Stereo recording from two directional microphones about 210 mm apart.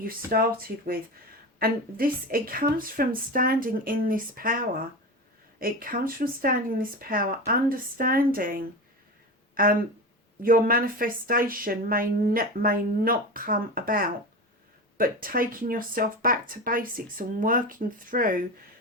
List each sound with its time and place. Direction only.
0.3 s speech: 45° right (ahead or behind)
10.4 s speech: 40° right (ahead or behind)